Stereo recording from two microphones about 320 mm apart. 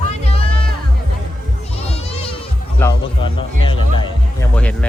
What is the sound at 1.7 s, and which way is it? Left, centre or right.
Children playing, centre.